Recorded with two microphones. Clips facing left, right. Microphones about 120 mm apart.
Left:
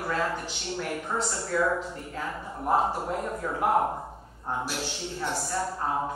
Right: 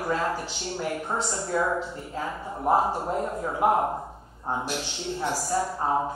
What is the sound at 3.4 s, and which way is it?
A woman's voice, 25° right (ahead or behind).